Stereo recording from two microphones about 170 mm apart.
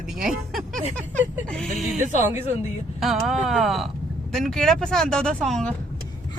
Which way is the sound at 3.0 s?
Centre (ahead or behind).